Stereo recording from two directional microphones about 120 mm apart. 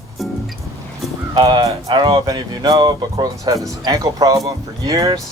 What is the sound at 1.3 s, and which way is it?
Speech, 40° right (ahead or behind).